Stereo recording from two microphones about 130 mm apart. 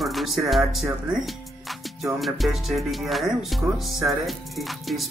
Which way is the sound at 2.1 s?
Centre (ahead or behind).